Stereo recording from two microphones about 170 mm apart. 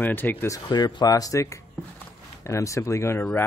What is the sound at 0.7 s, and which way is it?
Speech, 25° left (ahead or behind).